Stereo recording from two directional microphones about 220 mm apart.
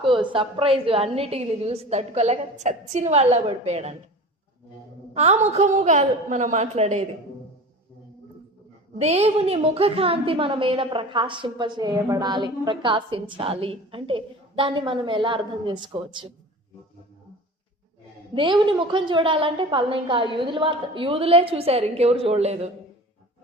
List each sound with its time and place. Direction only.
0.0 s a woman's voice: 25° right (ahead or behind)
5.1 s a woman's voice: 30° right (ahead or behind)
9.0 s a woman's voice: 30° right (ahead or behind)
18.3 s a woman's voice: 20° right (ahead or behind)